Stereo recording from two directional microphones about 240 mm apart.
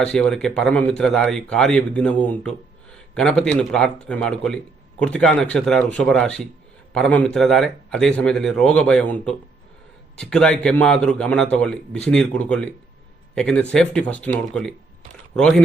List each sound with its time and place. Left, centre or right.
0.0 s a man's voice: centre